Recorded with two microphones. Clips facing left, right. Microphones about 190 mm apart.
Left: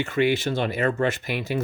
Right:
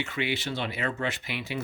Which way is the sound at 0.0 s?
45° left (ahead or behind).